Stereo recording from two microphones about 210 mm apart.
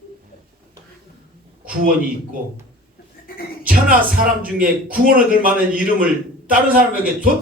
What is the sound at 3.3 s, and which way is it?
Music, 45° left (ahead or behind).